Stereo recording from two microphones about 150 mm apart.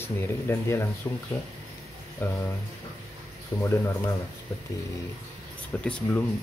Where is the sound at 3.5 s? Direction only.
30° left (ahead or behind).